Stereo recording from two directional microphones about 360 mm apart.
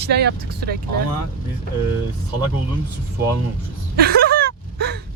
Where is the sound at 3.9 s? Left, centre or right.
Right.